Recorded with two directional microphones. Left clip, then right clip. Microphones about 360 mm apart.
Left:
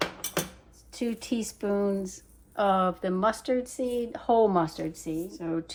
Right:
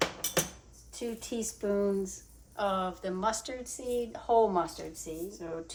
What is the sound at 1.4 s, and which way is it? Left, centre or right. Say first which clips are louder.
Speech: left 1 dB; centre.